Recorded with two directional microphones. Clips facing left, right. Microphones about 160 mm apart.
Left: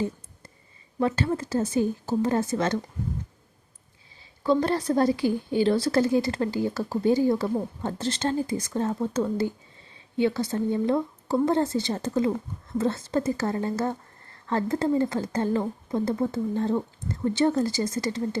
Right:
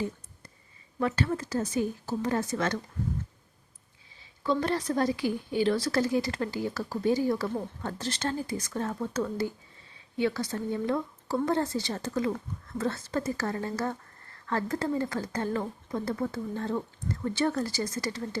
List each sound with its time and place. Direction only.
0.9 s speech: 25° left (ahead or behind)
4.4 s speech: 30° left (ahead or behind)